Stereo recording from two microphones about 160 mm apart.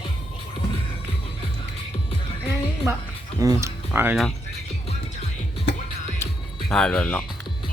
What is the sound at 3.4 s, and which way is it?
Speech, 20° right (ahead or behind).